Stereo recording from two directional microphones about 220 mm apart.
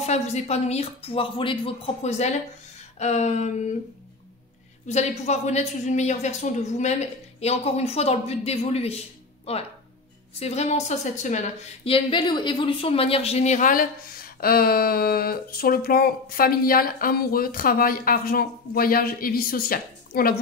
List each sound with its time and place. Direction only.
0.0 s a man's voice: 30° left (ahead or behind)
4.8 s a man's voice: 30° left (ahead or behind)